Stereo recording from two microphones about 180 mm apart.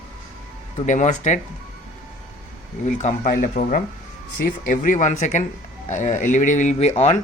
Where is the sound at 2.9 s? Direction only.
45° left (ahead or behind).